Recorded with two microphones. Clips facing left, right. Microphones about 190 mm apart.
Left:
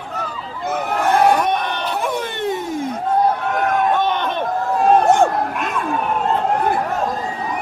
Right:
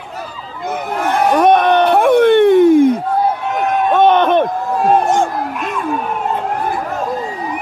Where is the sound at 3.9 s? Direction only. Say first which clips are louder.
Right 9 dB; 60° right (ahead or behind).